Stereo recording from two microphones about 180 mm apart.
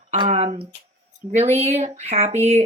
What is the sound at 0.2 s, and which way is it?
Speech, 35° right (ahead or behind).